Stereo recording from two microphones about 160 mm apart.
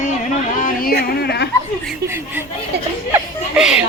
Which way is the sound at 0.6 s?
60° left (ahead or behind).